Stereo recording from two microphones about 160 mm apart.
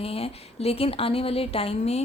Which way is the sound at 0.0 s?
35° left (ahead or behind).